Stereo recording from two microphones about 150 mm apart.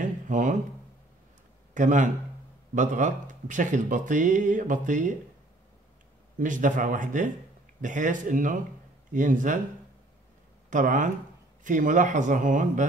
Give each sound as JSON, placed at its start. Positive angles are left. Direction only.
{"t": 0.0, "sound": "a sound", "side_deg": -55}
{"t": 1.7, "sound": "a man's voice", "side_deg": -55}
{"t": 6.4, "sound": "speech", "side_deg": -60}
{"t": 10.7, "sound": "speech", "side_deg": -60}